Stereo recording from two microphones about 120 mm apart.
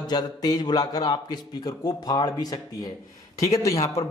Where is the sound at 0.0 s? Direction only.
35° left (ahead or behind).